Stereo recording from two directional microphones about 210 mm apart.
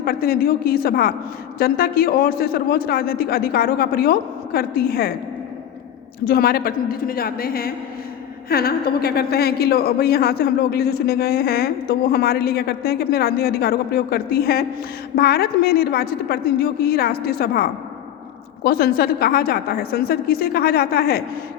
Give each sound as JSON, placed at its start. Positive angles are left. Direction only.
{"t": 0.0, "sound": "a woman's voice", "side_deg": 45}
{"t": 6.2, "sound": "a woman's voice", "side_deg": 45}